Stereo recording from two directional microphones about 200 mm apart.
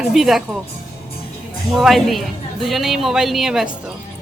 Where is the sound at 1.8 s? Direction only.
Centre (ahead or behind).